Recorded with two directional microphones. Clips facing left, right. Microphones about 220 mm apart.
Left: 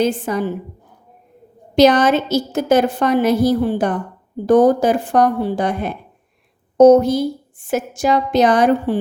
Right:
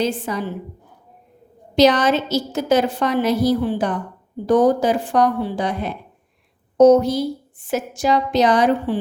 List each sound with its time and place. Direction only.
0.0 s a woman's voice: 50° left (ahead or behind)
1.7 s a woman's voice: 50° left (ahead or behind)